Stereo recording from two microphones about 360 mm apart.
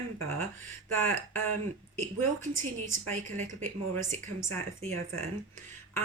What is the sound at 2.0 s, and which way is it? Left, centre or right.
A woman's voice, centre.